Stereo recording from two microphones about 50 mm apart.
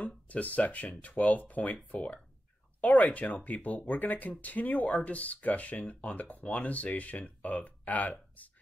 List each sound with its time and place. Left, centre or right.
0.0 s speech: left